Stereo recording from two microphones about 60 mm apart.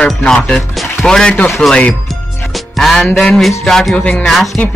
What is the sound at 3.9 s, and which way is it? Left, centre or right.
Speech, centre.